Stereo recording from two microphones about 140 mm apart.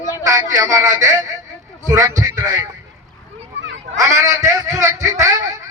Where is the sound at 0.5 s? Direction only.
20° right (ahead or behind).